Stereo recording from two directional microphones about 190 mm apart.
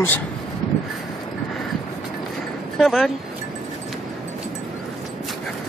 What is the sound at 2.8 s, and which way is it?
Speech, centre (ahead or behind).